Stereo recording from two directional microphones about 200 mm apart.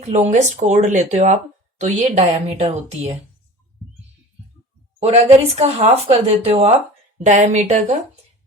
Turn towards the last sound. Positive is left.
turn(degrees=-35)  # may be behind; listen again after turning